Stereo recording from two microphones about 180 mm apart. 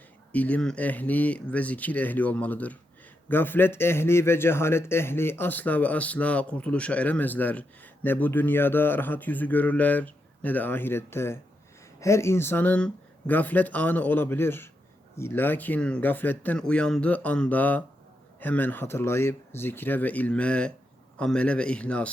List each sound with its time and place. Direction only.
0.3 s a man's voice: 10° left (ahead or behind)